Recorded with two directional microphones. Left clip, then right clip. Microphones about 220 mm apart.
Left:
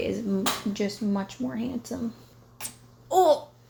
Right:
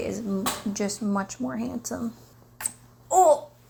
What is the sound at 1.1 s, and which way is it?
Speech, 20° left (ahead or behind).